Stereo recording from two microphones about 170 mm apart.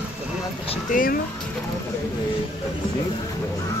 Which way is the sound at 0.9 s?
50° left (ahead or behind).